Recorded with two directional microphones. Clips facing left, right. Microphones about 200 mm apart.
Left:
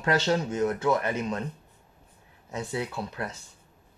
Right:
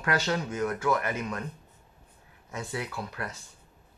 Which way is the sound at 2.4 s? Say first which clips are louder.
Left 3 dB; 25° left (ahead or behind).